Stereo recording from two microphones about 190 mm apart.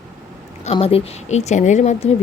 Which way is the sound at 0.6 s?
30° left (ahead or behind).